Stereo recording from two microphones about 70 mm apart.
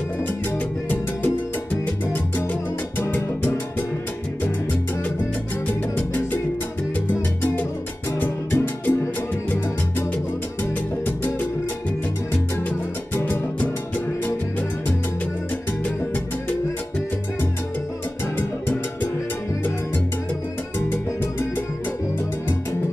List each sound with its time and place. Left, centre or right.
0.8 s music: left
3.0 s music: left
5.9 s music: left
8.2 s music: left
10.6 s music: left
13.1 s music: left